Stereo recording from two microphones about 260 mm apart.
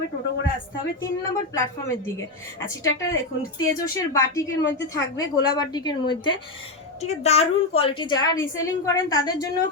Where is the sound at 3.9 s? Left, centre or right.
Centre.